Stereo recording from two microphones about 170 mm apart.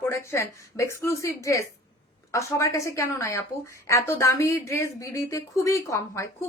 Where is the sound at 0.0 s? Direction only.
15° left (ahead or behind).